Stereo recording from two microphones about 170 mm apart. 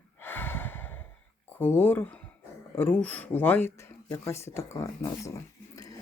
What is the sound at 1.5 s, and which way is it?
Speech, 10° left (ahead or behind).